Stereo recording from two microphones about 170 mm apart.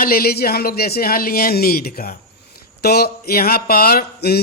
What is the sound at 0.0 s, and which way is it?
Speech, 60° left (ahead or behind).